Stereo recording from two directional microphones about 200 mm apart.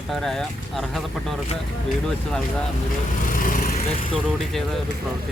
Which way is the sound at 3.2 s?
45° left (ahead or behind).